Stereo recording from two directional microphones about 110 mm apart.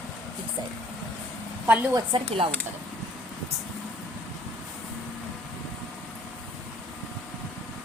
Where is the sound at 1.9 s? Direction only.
45° right (ahead or behind).